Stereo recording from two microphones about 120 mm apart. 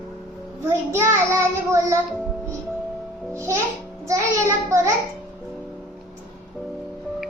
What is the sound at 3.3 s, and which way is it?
Speech, 25° right (ahead or behind).